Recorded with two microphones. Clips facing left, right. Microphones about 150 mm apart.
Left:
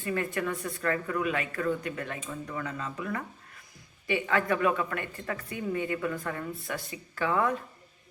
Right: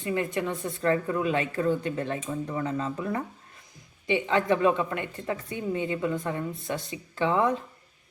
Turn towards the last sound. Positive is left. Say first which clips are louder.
# right 3 dB
turn(degrees=-20)  # may be behind; listen again after turning